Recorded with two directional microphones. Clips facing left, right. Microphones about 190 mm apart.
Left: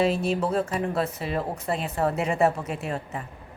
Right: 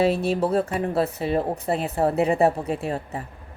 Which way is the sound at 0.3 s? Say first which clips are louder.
Right 3 dB; 35° right (ahead or behind).